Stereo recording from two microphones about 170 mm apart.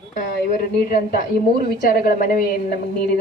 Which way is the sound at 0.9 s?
60° left (ahead or behind).